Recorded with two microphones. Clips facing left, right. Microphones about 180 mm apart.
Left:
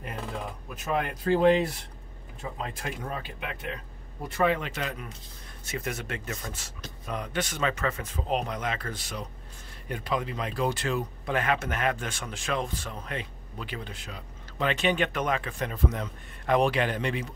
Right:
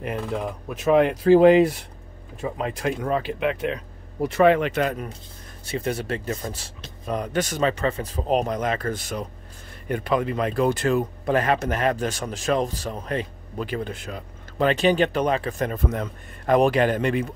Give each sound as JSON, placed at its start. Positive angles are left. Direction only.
{"t": 0.7, "sound": "speech", "side_deg": -80}
{"t": 5.7, "sound": "speech", "side_deg": -30}
{"t": 9.8, "sound": "speech", "side_deg": -55}